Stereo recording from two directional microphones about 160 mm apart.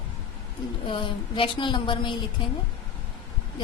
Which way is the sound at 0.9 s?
30° left (ahead or behind).